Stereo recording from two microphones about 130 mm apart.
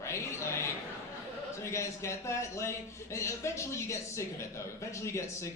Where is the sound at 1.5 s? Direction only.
20° left (ahead or behind).